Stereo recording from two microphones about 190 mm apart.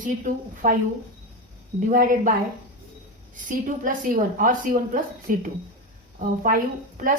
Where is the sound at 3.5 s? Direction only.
45° right (ahead or behind).